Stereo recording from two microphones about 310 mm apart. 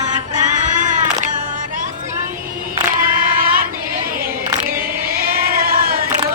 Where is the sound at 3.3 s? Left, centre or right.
Right.